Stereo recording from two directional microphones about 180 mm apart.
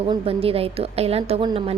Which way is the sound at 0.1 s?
30° right (ahead or behind).